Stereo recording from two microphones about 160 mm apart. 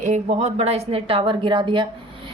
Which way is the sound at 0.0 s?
50° right (ahead or behind).